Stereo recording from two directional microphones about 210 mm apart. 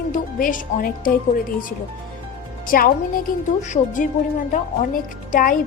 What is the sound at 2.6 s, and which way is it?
A woman's voice, 40° left (ahead or behind).